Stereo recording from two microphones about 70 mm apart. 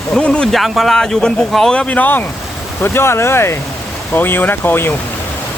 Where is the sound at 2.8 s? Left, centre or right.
Left.